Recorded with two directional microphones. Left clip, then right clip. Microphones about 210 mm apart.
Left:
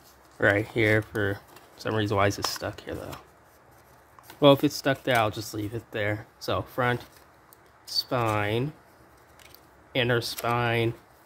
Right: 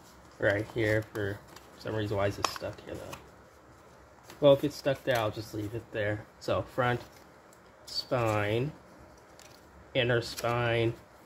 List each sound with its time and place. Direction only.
0.4 s speech: 35° left (ahead or behind)
4.4 s speech: 35° left (ahead or behind); by 8.6 s 20° left (ahead or behind)
9.9 s speech: 20° left (ahead or behind)